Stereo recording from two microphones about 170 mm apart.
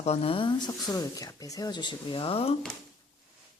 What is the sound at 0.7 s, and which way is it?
Speech, 20° left (ahead or behind).